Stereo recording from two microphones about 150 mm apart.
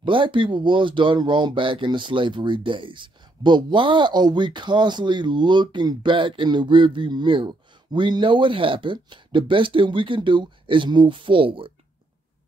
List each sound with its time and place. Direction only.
0.0 s speech: 35° right (ahead or behind)